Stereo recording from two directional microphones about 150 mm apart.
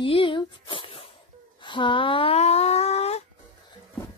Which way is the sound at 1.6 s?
35° left (ahead or behind).